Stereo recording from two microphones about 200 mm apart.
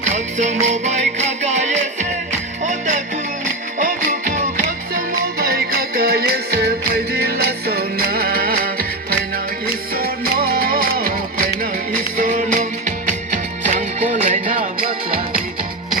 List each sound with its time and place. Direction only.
0.0 s music: 35° right (ahead or behind)
10.5 s music: 45° right (ahead or behind)
12.1 s music: 40° right (ahead or behind)